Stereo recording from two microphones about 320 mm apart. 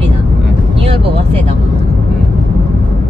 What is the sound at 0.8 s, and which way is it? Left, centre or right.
Speech, centre.